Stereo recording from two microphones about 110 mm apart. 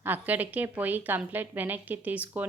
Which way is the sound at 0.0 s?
15° right (ahead or behind).